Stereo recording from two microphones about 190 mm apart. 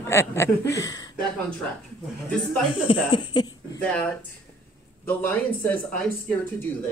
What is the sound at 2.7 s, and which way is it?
Speech, 25° left (ahead or behind).